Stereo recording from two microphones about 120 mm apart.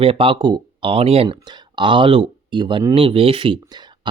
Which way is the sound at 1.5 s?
40° right (ahead or behind).